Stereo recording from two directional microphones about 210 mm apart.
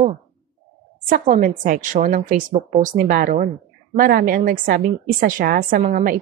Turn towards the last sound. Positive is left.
turn(degrees=-40)  # may be behind; listen again after turning